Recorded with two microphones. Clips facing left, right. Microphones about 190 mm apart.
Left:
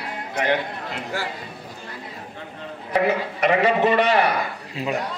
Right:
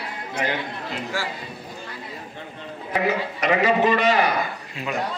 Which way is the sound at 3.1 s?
55° left (ahead or behind).